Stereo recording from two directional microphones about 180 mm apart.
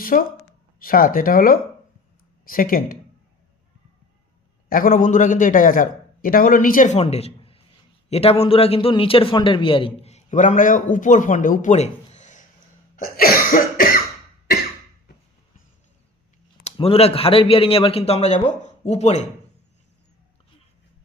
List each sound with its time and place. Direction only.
0.0 s a man's voice: 50° left (ahead or behind)
4.7 s a man's voice: 50° left (ahead or behind)
13.0 s a man's voice: 55° left (ahead or behind)
16.6 s a man's voice: 30° left (ahead or behind)